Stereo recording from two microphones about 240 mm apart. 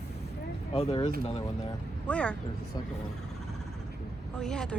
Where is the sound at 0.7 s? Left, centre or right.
Left.